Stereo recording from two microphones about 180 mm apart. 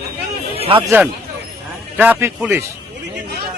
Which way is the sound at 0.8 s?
10° right (ahead or behind).